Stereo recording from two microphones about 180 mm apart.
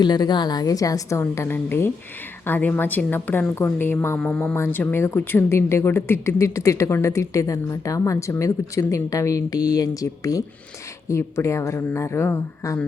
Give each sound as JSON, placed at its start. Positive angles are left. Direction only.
{"t": 0.0, "sound": "a woman's voice", "side_deg": 25}